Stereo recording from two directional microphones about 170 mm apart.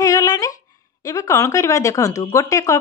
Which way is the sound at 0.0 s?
20° left (ahead or behind).